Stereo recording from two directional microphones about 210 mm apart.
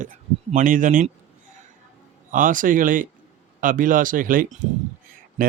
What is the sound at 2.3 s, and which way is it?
Speech, 40° right (ahead or behind).